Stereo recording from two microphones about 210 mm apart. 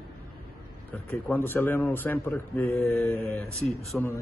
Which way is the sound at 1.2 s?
10° left (ahead or behind).